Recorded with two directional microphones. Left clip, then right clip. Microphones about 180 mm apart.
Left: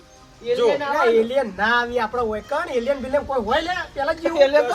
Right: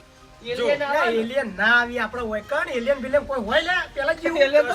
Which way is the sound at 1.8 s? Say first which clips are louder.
Left 3 dB; 30° left (ahead or behind).